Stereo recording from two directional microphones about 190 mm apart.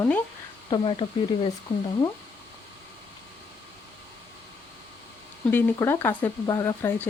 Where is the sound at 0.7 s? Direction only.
25° left (ahead or behind).